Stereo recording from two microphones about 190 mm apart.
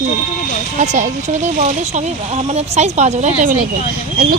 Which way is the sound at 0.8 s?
40° right (ahead or behind).